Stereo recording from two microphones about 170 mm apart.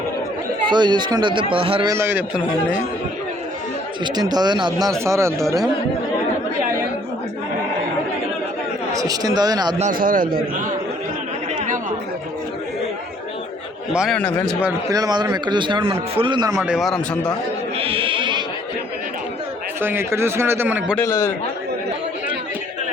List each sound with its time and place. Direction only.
0.7 s speech: 25° right (ahead or behind)
1.9 s speech: 15° right (ahead or behind)
4.0 s speech: 25° right (ahead or behind)
8.9 s speech: 20° right (ahead or behind)
9.7 s a man's voice: 50° right (ahead or behind)
13.9 s a man's voice: 5° right (ahead or behind)
14.2 s a man's voice: 5° left (ahead or behind)
14.8 s speech: 20° right (ahead or behind)
16.6 s a man's voice: centre (ahead or behind)
17.7 s music: 35° right (ahead or behind)
19.8 s speech: 15° right (ahead or behind)
20.9 s a man's voice: 20° left (ahead or behind)